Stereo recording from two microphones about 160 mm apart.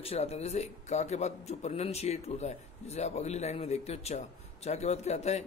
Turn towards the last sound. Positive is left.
turn(degrees=45)  # may be behind; listen again after turning